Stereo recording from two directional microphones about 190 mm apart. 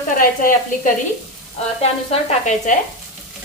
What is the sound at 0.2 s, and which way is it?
Speech, 45° left (ahead or behind).